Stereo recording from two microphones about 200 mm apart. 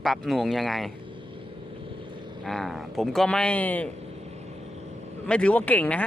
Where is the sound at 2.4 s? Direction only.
Centre (ahead or behind).